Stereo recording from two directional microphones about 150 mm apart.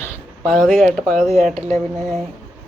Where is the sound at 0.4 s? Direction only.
Centre (ahead or behind).